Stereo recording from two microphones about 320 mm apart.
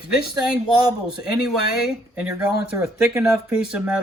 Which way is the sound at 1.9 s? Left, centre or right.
Centre.